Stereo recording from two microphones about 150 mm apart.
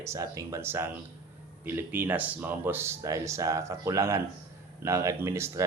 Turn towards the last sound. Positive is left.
turn(degrees=-20)  # may be behind; listen again after turning